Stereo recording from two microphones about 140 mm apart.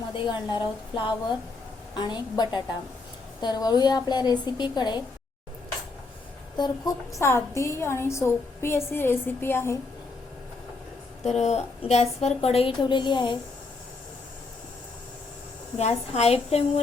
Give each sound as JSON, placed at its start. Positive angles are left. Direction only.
{"t": 0.1, "sound": "a woman's voice", "side_deg": 35}
{"t": 6.6, "sound": "a woman's voice", "side_deg": 25}
{"t": 11.2, "sound": "a woman's voice", "side_deg": 55}
{"t": 15.8, "sound": "a woman's voice", "side_deg": 50}